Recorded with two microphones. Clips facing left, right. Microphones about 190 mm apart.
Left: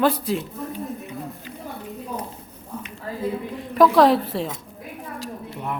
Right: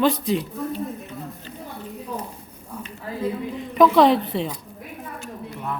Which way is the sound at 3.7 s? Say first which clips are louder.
Even; centre (ahead or behind).